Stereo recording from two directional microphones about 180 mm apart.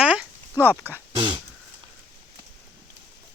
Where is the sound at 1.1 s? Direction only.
25° right (ahead or behind).